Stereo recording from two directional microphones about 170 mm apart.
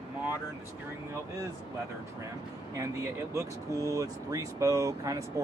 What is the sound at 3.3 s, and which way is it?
Speech, 20° right (ahead or behind).